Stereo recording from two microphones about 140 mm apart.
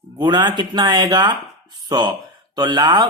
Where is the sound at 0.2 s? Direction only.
30° right (ahead or behind).